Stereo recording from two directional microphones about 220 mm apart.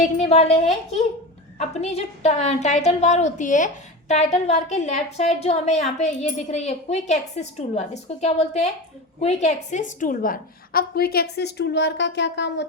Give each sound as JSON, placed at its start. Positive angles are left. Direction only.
{"t": 0.0, "sound": "a woman's voice", "side_deg": 30}
{"t": 1.5, "sound": "a woman's voice", "side_deg": 30}